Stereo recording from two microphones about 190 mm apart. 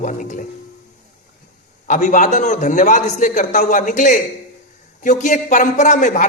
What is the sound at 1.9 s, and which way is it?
A woman's voice, 40° left (ahead or behind).